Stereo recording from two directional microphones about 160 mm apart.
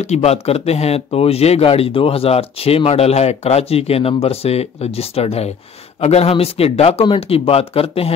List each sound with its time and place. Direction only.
0.0 s speech: 40° left (ahead or behind)